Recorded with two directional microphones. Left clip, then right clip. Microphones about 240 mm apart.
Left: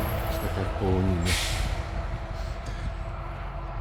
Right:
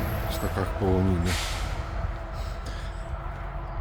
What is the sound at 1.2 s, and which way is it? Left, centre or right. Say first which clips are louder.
Speech: left 2 dB; left.